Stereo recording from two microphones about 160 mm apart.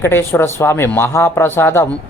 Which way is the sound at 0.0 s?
15° left (ahead or behind).